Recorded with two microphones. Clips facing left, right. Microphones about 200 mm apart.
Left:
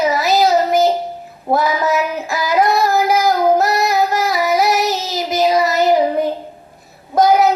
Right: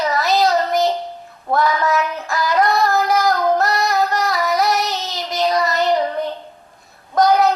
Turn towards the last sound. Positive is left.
turn(degrees=5)  # may be behind; listen again after turning